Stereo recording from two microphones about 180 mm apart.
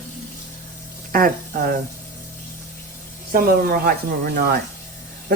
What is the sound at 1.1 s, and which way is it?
Speech, 50° right (ahead or behind).